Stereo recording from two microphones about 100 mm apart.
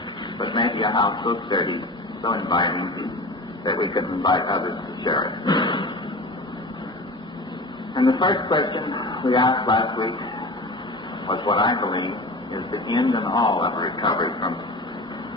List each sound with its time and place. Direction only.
0.3 s a man's voice: 50° left (ahead or behind)
7.9 s a man's voice: 50° left (ahead or behind)
11.3 s a man's voice: 50° left (ahead or behind)